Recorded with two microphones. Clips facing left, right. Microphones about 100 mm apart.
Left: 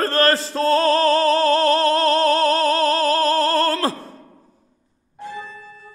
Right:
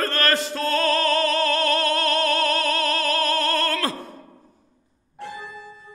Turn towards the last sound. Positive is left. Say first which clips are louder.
# left 2 dB
turn(degrees=-70)  # may be behind; listen again after turning